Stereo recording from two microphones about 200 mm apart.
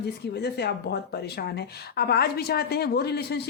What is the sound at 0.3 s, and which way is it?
A woman's voice, 55° left (ahead or behind).